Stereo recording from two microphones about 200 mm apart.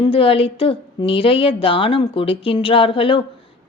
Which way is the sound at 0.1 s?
25° left (ahead or behind).